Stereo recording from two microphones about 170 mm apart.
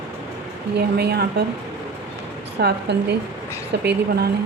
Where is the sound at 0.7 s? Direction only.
70° right (ahead or behind).